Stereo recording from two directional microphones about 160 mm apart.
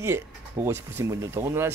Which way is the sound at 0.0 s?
15° right (ahead or behind).